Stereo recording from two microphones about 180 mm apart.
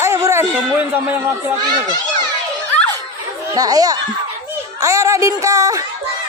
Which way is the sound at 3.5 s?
20° right (ahead or behind).